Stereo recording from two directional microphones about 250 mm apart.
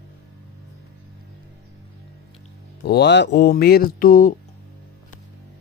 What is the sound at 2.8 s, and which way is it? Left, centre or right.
Speech, left.